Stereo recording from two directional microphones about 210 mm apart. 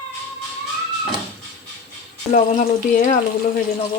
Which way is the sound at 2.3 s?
35° left (ahead or behind).